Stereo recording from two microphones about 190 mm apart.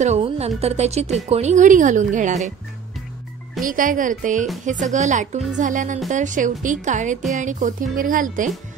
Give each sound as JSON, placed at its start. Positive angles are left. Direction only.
{"t": 0.0, "sound": "a sound", "side_deg": -35}
{"t": 0.6, "sound": "speech", "side_deg": -35}
{"t": 3.6, "sound": "speech", "side_deg": -45}